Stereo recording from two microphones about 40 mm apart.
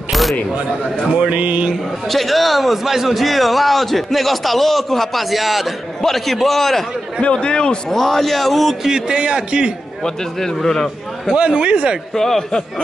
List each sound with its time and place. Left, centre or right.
0.1 s single-lens reflex camera: centre
1.2 s speech: right
2.0 s a man's voice: centre
7.2 s a man's voice: left
7.9 s a man's voice: centre
8.8 s a man's voice: centre
10.0 s a man's voice: centre
11.3 s a man's voice: right
12.1 s a man's voice: centre